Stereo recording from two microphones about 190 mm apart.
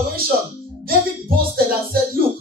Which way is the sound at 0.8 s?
50° right (ahead or behind).